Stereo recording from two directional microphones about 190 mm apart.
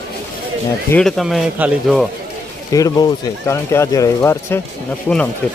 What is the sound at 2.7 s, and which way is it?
Speech, 20° left (ahead or behind).